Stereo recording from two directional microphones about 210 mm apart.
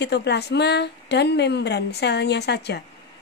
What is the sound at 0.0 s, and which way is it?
A woman's voice, 55° left (ahead or behind).